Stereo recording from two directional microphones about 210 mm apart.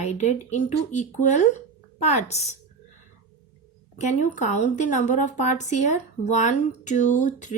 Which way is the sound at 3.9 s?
35° left (ahead or behind).